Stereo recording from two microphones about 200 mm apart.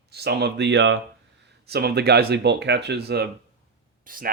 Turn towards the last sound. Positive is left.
turn(degrees=-45)  # may be behind; listen again after turning